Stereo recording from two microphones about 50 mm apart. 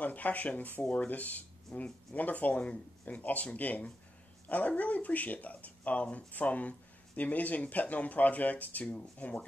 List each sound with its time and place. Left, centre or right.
0.0 s speech: left